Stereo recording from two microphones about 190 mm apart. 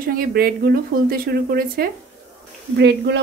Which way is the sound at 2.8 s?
65° right (ahead or behind).